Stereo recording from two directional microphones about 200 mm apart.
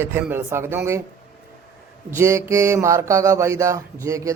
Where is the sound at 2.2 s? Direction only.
15° right (ahead or behind).